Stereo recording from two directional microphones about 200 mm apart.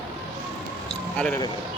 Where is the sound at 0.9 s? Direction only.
5° left (ahead or behind).